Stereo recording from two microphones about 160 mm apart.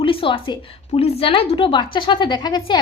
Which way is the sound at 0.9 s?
35° left (ahead or behind).